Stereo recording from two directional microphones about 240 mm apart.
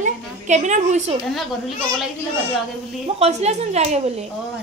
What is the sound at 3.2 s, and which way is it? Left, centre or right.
A woman's voice, right.